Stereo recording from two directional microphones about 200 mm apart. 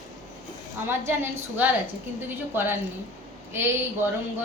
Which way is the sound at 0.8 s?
10° right (ahead or behind).